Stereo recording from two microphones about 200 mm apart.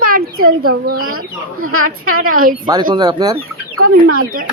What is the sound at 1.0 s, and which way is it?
A woman's voice, 90° right.